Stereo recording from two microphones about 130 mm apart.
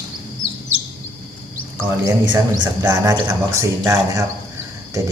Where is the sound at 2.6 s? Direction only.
30° right (ahead or behind).